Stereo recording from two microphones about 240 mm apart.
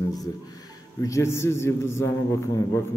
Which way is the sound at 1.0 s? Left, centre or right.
Centre.